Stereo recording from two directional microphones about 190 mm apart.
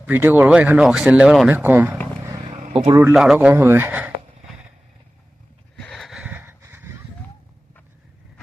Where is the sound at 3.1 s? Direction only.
5° right (ahead or behind).